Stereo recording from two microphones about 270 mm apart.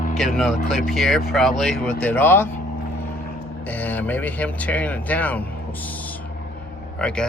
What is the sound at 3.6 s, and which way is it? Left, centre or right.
Speech, centre.